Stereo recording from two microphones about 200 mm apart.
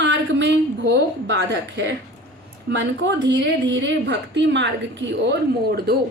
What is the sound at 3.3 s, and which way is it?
A woman's voice, 65° right (ahead or behind).